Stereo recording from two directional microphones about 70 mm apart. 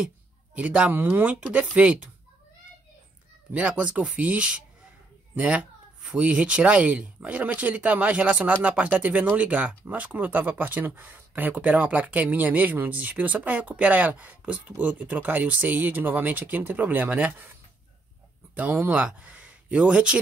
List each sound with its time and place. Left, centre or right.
0.6 s speech: centre
3.5 s speech: centre
18.5 s speech: right